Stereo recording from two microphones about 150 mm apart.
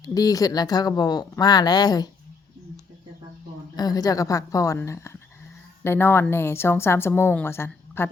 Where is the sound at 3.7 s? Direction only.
25° left (ahead or behind).